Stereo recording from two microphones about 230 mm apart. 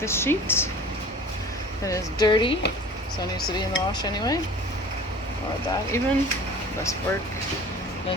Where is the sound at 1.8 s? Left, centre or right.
Centre.